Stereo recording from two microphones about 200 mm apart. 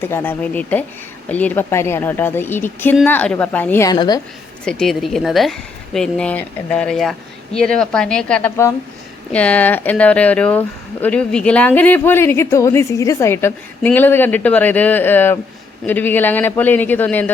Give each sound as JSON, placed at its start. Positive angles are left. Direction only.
{"t": 0.0, "sound": "speech", "side_deg": 10}
{"t": 3.9, "sound": "a woman's voice", "side_deg": 20}
{"t": 4.6, "sound": "a woman's voice", "side_deg": 5}